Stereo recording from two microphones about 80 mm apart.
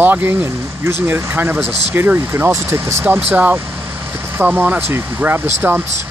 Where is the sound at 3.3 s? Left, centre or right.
Centre.